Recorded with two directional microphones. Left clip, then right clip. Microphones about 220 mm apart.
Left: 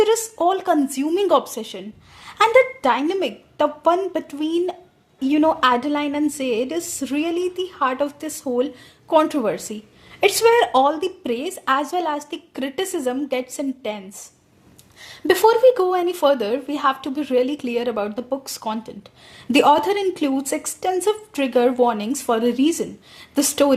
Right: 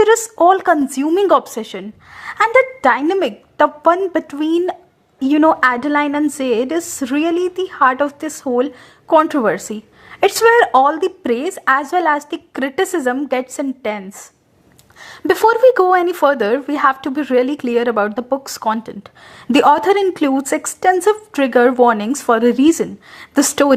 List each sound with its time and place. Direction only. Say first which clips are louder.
0.0 s a woman's voice: right 7 dB; 20° right (ahead or behind)